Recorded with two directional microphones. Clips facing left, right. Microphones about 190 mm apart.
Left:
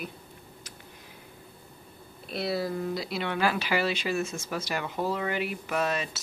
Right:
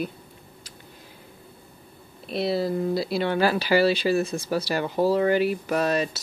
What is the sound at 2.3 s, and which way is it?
Speech, 25° right (ahead or behind).